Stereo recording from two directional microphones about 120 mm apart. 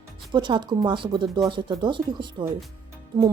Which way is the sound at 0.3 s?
40° right (ahead or behind).